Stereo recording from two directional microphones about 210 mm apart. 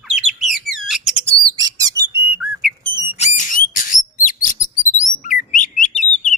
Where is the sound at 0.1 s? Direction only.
Centre (ahead or behind).